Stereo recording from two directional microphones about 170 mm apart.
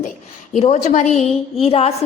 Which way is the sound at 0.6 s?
40° left (ahead or behind).